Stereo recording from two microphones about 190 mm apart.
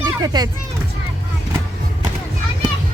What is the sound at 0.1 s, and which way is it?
Speech, 20° right (ahead or behind).